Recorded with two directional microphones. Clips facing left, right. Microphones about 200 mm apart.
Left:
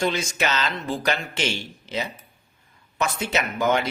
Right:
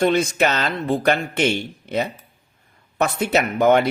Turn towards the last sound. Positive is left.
turn(degrees=-60)  # may be behind; listen again after turning